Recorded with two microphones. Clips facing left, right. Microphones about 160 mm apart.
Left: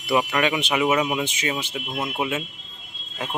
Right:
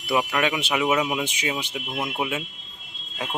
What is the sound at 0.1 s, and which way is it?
Speech, centre (ahead or behind).